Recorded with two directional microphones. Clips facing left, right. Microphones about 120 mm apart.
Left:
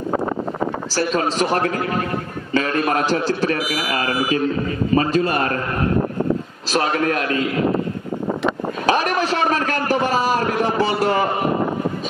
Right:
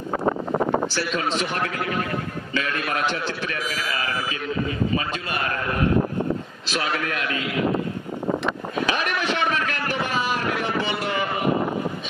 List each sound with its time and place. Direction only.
0.9 s a man's voice: 40° left (ahead or behind)
6.7 s a man's voice: 40° left (ahead or behind)
8.8 s a man's voice: 40° left (ahead or behind)